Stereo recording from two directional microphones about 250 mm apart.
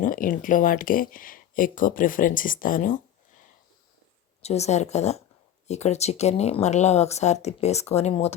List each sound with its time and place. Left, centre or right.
0.0 s speech: left
4.4 s speech: left